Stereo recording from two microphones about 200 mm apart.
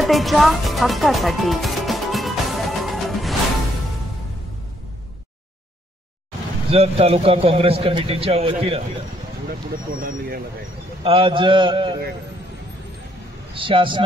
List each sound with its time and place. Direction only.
0.0 s music: centre (ahead or behind)
6.7 s a man's voice: 30° right (ahead or behind)
10.0 s speech: 45° right (ahead or behind)
11.1 s a man's voice: 25° right (ahead or behind)
13.6 s a man's voice: 25° right (ahead or behind)